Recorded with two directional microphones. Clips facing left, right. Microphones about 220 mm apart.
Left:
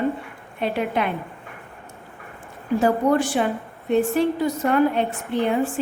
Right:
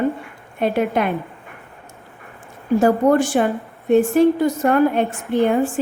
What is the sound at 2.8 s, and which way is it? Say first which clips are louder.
A woman's voice: right 4 dB; 45° right (ahead or behind).